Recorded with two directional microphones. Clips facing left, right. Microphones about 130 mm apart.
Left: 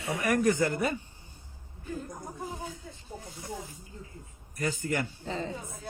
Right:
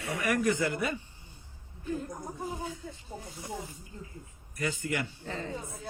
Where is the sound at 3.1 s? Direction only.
Centre (ahead or behind).